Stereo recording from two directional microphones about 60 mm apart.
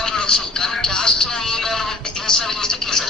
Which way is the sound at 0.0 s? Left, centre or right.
Centre.